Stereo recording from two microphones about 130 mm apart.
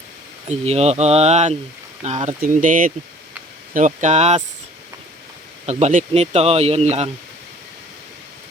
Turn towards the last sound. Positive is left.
turn(degrees=-55)  # may be behind; listen again after turning